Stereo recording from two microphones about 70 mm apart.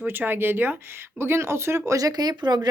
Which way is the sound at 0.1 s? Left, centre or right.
Right.